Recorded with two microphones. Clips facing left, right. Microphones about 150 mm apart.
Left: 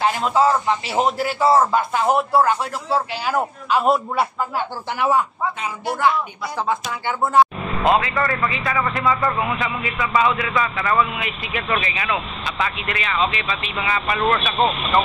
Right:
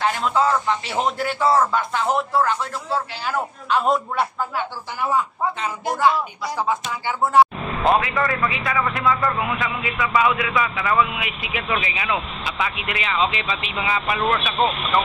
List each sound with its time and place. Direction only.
0.0 s a man's voice: 15° left (ahead or behind)
4.8 s a man's voice: 75° left (ahead or behind)
6.6 s speech: 15° right (ahead or behind)
7.9 s speech: centre (ahead or behind)
12.9 s speech: 20° right (ahead or behind)
14.0 s speech: centre (ahead or behind)